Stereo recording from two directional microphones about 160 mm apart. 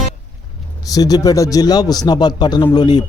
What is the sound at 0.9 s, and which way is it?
A man's voice, 25° left (ahead or behind).